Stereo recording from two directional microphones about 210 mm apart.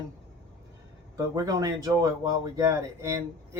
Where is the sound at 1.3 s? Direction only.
15° right (ahead or behind).